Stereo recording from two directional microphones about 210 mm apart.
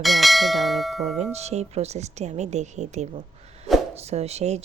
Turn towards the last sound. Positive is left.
turn(degrees=-30)  # may be behind; listen again after turning